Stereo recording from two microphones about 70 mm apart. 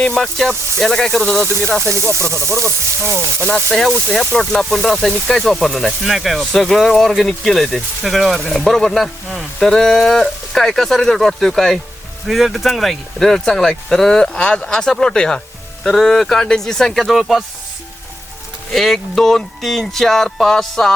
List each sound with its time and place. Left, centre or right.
0.0 s speech: centre
1.8 s speech: right
3.4 s speech: centre
18.7 s speech: centre